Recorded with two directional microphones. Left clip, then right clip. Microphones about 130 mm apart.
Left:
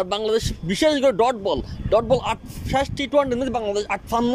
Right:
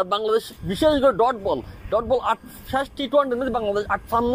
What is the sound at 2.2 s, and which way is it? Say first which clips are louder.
A man's voice: right 2 dB; 50° left (ahead or behind).